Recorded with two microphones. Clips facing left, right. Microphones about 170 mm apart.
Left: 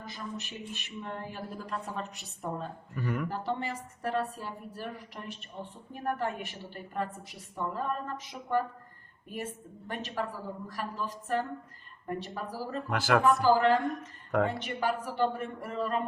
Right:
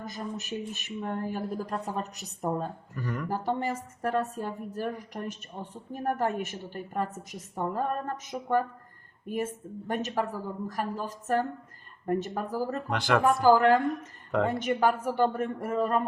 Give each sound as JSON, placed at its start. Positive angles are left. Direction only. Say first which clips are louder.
{"t": 0.0, "sound": "a woman's voice", "louder": "right 4 dB", "side_deg": -45}
{"t": 2.9, "sound": "speech", "louder": "left 4 dB", "side_deg": 10}
{"t": 3.2, "sound": "a woman's voice", "louder": "right 4 dB", "side_deg": -45}
{"t": 12.9, "sound": "speech", "louder": "even", "side_deg": 5}
{"t": 13.4, "sound": "a woman's voice", "louder": "right 3 dB", "side_deg": -45}